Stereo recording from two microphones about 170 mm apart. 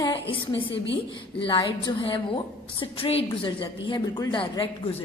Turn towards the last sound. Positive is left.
turn(degrees=30)  # may be behind; listen again after turning